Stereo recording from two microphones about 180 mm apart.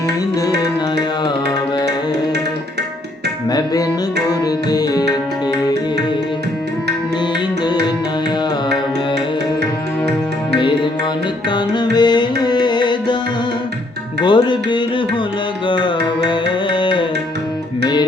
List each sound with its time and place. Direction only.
4.3 s music: 20° left (ahead or behind)
11.4 s music: 25° left (ahead or behind)
14.2 s music: 25° left (ahead or behind)